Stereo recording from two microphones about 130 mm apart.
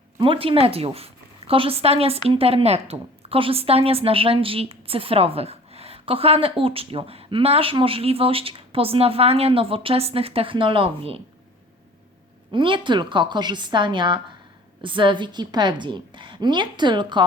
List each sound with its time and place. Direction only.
0.2 s a woman's voice: 40° right (ahead or behind)
12.5 s a woman's voice: 40° right (ahead or behind)